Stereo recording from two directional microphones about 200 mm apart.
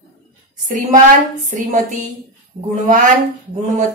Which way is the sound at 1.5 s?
40° right (ahead or behind).